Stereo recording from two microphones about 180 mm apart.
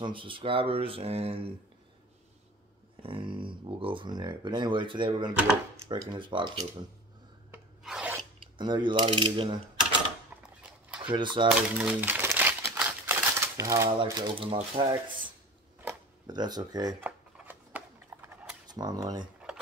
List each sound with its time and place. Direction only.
0.0 s speech: 30° right (ahead or behind)
3.0 s speech: 30° right (ahead or behind)
7.5 s filing: 5° right (ahead or behind)
8.5 s speech: 25° right (ahead or behind)
10.6 s a sound: 5° right (ahead or behind)
11.1 s speech: 25° right (ahead or behind)
11.8 s crumpling: 10° right (ahead or behind)
14.0 s speech: 20° right (ahead or behind)
15.8 s camera: 20° right (ahead or behind)
17.0 s a sound: 10° right (ahead or behind)
18.7 s speech: 20° right (ahead or behind)